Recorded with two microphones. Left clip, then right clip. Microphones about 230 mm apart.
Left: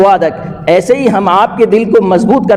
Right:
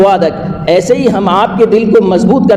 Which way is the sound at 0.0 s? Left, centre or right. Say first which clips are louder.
Even; left.